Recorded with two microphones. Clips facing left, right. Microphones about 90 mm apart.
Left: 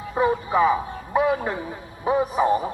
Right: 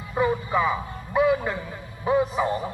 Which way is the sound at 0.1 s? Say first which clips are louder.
Left 2 dB; 25° left (ahead or behind).